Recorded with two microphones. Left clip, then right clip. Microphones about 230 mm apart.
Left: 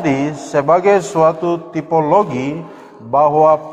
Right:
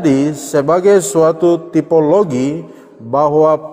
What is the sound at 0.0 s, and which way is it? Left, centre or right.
A man's voice, right.